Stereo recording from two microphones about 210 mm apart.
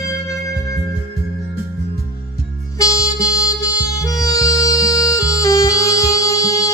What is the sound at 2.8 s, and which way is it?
Music, 15° left (ahead or behind).